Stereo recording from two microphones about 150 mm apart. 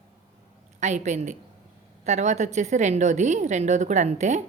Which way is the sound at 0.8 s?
50° right (ahead or behind).